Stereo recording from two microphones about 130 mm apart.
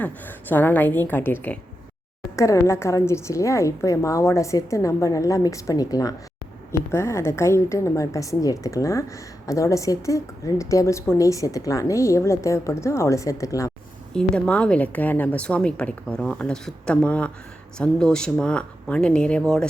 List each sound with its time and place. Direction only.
0.0 s a woman's voice: 15° left (ahead or behind)
2.3 s a woman's voice: 25° left (ahead or behind)
14.1 s a woman's voice: 5° left (ahead or behind)